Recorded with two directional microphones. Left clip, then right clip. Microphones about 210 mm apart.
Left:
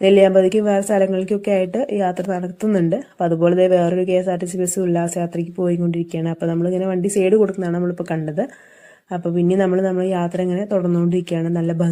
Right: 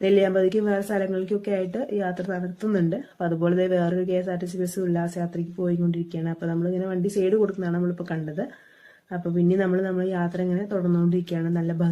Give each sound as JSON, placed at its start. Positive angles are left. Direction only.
{"t": 0.0, "sound": "speech", "side_deg": 30}
{"t": 9.5, "sound": "speech", "side_deg": 30}